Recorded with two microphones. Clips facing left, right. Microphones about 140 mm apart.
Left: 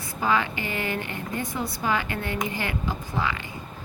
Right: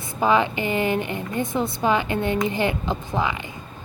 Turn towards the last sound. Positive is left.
turn(degrees=-20)  # may be behind; listen again after turning